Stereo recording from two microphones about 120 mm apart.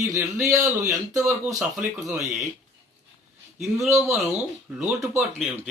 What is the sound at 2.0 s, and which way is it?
Speech, centre (ahead or behind).